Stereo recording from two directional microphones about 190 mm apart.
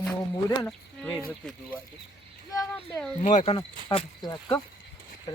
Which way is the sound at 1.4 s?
5° left (ahead or behind).